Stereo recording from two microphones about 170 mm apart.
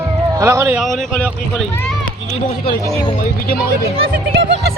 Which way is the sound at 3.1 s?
55° left (ahead or behind).